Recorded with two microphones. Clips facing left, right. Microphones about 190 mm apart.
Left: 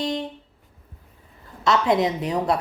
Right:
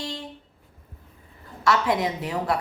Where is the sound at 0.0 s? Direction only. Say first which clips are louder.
Left 8 dB; 20° left (ahead or behind).